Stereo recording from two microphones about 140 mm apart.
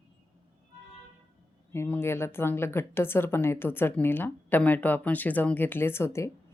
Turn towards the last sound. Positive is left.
turn(degrees=20)  # may be behind; listen again after turning